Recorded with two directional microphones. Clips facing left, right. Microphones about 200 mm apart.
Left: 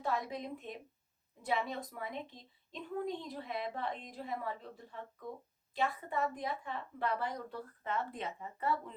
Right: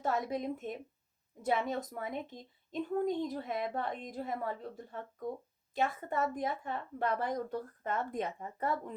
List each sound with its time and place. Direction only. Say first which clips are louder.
0.0 s a woman's voice: right 4 dB; 45° right (ahead or behind)